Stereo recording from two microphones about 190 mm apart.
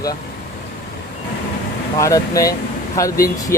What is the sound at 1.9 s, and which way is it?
Speech, 15° left (ahead or behind).